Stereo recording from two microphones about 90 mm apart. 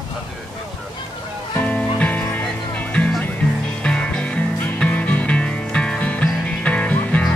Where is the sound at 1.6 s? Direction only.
15° left (ahead or behind).